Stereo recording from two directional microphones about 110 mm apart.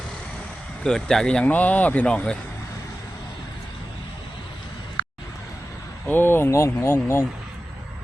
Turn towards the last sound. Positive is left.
turn(degrees=25)  # may be behind; listen again after turning